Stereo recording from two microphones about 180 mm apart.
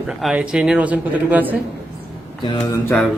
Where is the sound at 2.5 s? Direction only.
20° left (ahead or behind).